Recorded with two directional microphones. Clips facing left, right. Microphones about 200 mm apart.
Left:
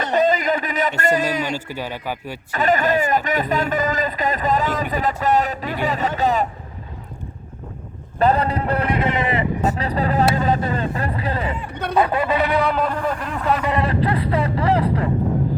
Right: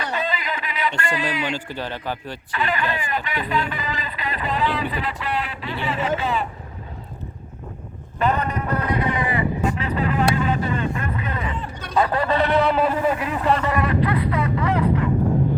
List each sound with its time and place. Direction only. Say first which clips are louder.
0.1 s a sound: left 9 dB; 45° left (ahead or behind)
1.5 s a man's voice: left 1 dB; 10° left (ahead or behind)
2.5 s speech: left 7 dB; 45° left (ahead or behind)
8.2 s a man's voice: left 4 dB; 35° left (ahead or behind)
9.6 s speech: left 2 dB; 40° left (ahead or behind)
10.3 s vehicle: left 2 dB; 40° left (ahead or behind)
11.7 s chatter: left 9 dB; 60° left (ahead or behind)
12.2 s a man's voice: even; 5° left (ahead or behind)
13.7 s a sound: left 1 dB; 30° left (ahead or behind)